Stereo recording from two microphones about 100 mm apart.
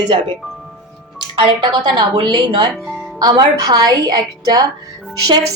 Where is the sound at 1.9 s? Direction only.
45° right (ahead or behind).